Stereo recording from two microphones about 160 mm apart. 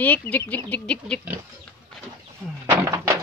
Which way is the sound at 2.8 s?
15° right (ahead or behind).